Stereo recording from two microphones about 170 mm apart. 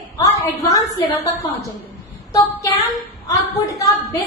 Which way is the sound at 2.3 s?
20° left (ahead or behind).